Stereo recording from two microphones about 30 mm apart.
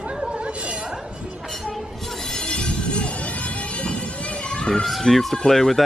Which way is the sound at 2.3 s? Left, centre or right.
Left.